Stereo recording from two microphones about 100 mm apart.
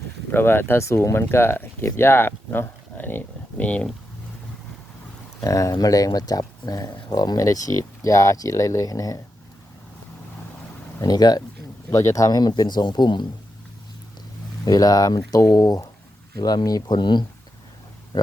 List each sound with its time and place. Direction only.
0.3 s speech: 20° left (ahead or behind)
5.4 s speech: 35° left (ahead or behind)
11.0 s speech: 40° left (ahead or behind)
11.9 s speech: 30° left (ahead or behind); by 13.2 s 45° left (ahead or behind)
14.6 s speech: 40° left (ahead or behind)